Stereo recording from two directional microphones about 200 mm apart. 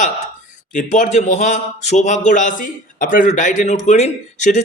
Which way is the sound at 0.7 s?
40° left (ahead or behind).